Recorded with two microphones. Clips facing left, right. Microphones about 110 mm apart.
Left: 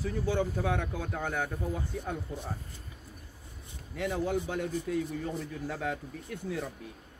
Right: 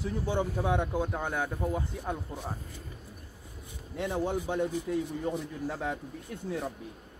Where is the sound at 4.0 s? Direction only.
25° right (ahead or behind).